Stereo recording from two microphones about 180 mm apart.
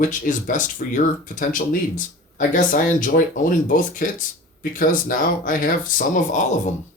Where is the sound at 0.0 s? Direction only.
45° left (ahead or behind).